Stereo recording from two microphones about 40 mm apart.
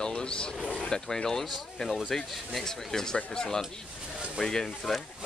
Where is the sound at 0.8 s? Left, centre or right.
Centre.